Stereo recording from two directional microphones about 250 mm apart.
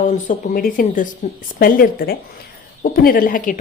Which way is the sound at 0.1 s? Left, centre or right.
Left.